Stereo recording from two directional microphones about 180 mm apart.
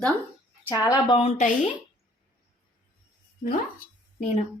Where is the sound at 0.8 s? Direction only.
25° left (ahead or behind).